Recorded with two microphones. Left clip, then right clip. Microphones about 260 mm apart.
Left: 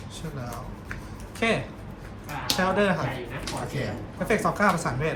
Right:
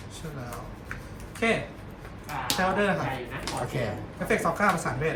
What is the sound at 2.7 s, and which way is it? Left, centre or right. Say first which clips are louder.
Speech: left 2 dB; centre.